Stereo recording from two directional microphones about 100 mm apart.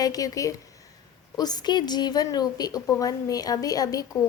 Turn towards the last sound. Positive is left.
turn(degrees=35)  # may be behind; listen again after turning